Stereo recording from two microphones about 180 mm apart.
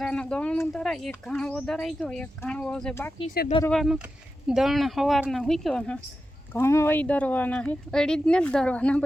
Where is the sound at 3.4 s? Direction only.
60° left (ahead or behind).